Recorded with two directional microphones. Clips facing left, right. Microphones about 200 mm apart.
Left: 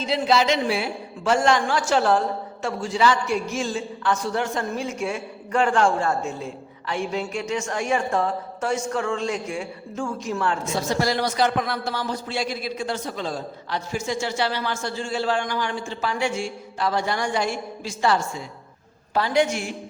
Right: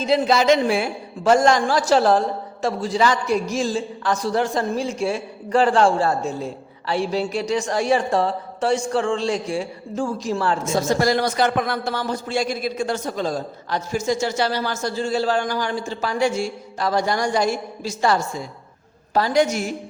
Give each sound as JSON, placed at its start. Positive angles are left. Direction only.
{"t": 0.0, "sound": "a man's voice", "side_deg": -45}